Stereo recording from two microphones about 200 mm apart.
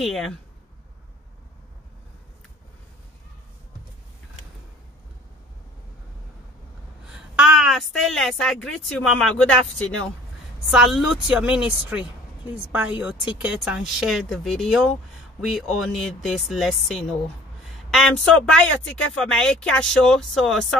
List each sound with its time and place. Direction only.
0.0 s a woman's voice: centre (ahead or behind)
7.1 s a woman's voice: 5° right (ahead or behind)